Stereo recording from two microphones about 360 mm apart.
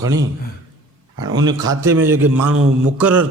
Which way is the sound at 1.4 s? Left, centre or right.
Centre.